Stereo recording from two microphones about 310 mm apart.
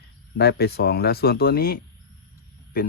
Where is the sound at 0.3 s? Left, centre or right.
Left.